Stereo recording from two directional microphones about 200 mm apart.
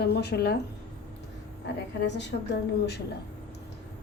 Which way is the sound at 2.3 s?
60° left (ahead or behind).